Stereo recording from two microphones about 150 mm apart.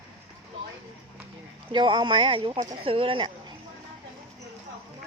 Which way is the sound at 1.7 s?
30° right (ahead or behind).